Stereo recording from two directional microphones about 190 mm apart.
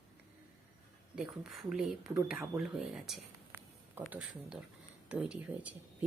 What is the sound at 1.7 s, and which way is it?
Speech, 5° right (ahead or behind).